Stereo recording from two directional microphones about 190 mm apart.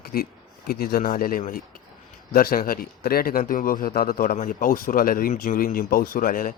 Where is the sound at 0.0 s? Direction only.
50° left (ahead or behind).